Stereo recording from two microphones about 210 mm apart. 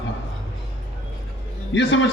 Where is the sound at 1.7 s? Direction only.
60° left (ahead or behind).